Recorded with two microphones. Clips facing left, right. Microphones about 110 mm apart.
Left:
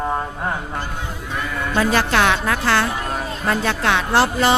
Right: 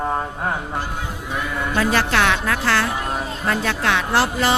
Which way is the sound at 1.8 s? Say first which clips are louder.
Left 2 dB; 20° left (ahead or behind).